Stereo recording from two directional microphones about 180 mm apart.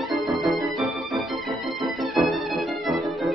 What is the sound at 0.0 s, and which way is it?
Music, centre (ahead or behind).